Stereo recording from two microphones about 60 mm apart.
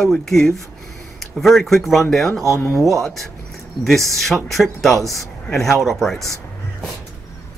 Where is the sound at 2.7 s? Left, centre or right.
Right.